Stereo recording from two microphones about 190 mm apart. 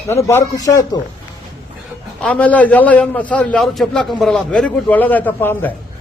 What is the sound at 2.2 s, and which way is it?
A man's voice, 5° left (ahead or behind).